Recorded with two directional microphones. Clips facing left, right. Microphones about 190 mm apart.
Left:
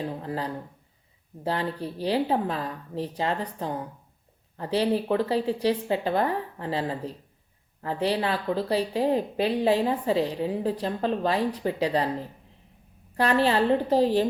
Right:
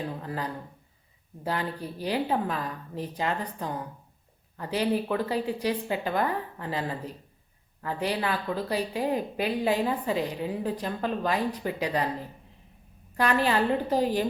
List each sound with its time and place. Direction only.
0.0 s speech: 30° left (ahead or behind)
13.1 s speech: 30° left (ahead or behind)